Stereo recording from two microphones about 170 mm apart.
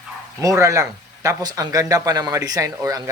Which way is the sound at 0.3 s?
20° right (ahead or behind).